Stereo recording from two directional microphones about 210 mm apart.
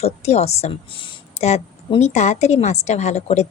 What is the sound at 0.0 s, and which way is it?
A woman's voice, 30° left (ahead or behind).